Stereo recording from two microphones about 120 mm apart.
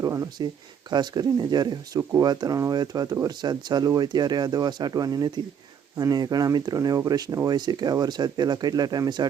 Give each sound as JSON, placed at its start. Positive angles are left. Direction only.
{"t": 0.0, "sound": "speech", "side_deg": -25}